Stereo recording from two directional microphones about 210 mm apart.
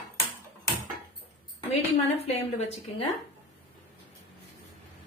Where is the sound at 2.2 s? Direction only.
30° left (ahead or behind).